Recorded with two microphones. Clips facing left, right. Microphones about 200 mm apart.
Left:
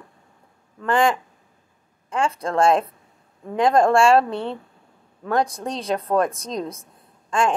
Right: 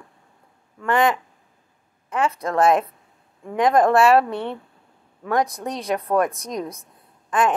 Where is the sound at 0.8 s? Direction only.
30° left (ahead or behind).